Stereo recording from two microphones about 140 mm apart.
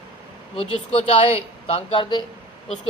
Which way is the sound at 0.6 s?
40° left (ahead or behind).